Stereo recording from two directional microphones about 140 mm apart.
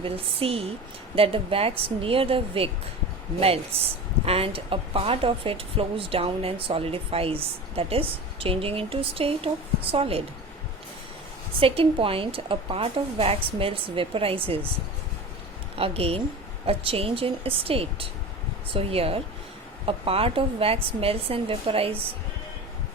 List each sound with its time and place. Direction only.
0.0 s a woman's voice: 45° right (ahead or behind)
3.7 s a woman's voice: 45° right (ahead or behind)
11.6 s speech: 40° right (ahead or behind)
15.8 s a woman's voice: 45° right (ahead or behind)